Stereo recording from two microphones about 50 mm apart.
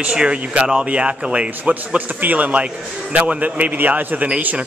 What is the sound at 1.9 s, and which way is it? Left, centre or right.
A man's voice, right.